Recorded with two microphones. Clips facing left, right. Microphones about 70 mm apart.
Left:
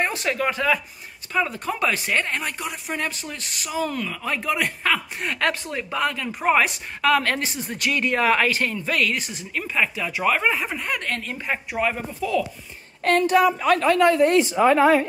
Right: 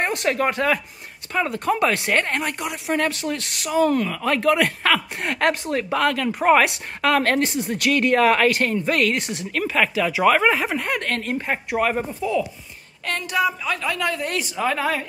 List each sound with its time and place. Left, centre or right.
0.1 s speech: right
6.4 s speech: right
10.9 s speech: right
12.2 s speech: right
13.0 s a woman's voice: left